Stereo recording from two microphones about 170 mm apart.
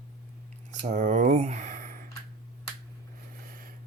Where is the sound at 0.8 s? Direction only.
50° right (ahead or behind).